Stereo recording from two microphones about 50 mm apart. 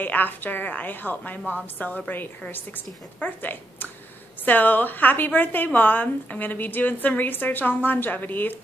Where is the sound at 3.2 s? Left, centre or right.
Left.